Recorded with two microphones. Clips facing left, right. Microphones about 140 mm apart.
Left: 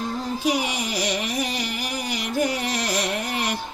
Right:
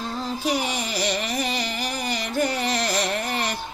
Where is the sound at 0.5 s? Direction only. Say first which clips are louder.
Left 1 dB; 10° left (ahead or behind).